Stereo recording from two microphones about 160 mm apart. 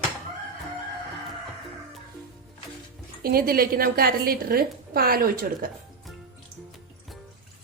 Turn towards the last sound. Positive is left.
turn(degrees=-65)  # may be behind; listen again after turning